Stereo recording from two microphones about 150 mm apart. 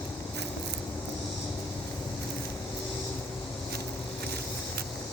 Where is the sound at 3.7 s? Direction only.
90° right.